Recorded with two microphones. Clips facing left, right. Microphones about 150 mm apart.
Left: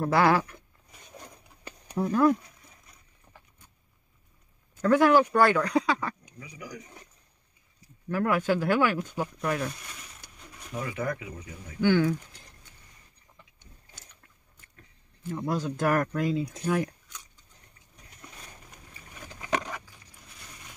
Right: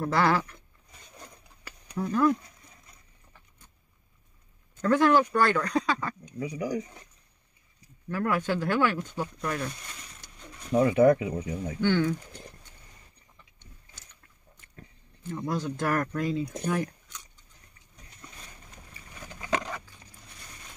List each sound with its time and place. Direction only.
0.0 s speech: 15° left (ahead or behind)
1.9 s speech: 25° left (ahead or behind)
4.8 s speech: 10° left (ahead or behind)
6.4 s speech: 30° right (ahead or behind)
8.1 s speech: 10° left (ahead or behind)
10.9 s speech: 25° right (ahead or behind)
11.8 s speech: 10° left (ahead or behind)
15.3 s speech: 10° left (ahead or behind)